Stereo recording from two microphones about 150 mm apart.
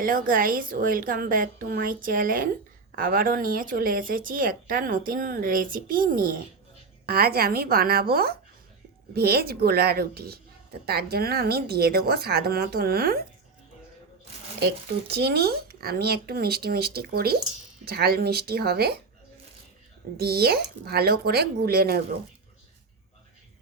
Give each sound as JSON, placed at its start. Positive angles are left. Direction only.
{"t": 0.0, "sound": "speech", "side_deg": -65}
{"t": 7.0, "sound": "speech", "side_deg": -90}
{"t": 14.6, "sound": "speech", "side_deg": -90}
{"t": 20.1, "sound": "speech", "side_deg": -90}